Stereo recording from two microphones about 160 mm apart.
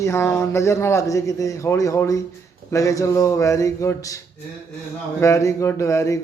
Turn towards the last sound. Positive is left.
turn(degrees=20)  # may be behind; listen again after turning